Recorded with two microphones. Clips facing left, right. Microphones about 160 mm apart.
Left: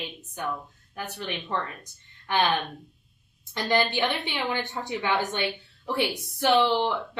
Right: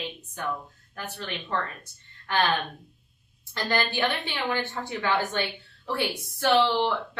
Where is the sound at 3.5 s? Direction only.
15° left (ahead or behind).